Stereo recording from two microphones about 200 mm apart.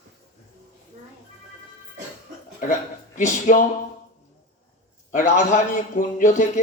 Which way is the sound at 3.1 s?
40° left (ahead or behind).